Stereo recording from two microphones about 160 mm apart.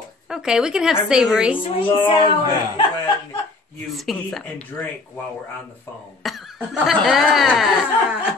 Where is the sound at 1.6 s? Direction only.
30° left (ahead or behind).